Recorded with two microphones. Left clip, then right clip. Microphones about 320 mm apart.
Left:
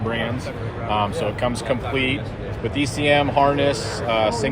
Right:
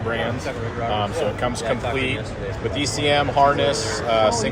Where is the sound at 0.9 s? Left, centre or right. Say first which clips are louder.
Left 3 dB; left.